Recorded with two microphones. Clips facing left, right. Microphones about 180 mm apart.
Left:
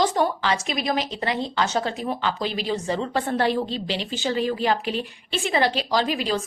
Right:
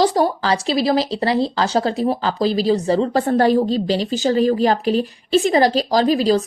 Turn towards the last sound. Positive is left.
turn(degrees=-40)  # may be behind; listen again after turning